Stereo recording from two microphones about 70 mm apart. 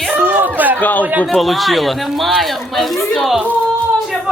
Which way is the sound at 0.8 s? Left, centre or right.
Left.